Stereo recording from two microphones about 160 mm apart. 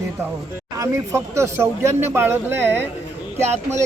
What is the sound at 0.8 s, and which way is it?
Speech, 20° right (ahead or behind).